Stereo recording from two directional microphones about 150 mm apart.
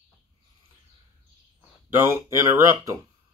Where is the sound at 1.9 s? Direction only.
15° right (ahead or behind).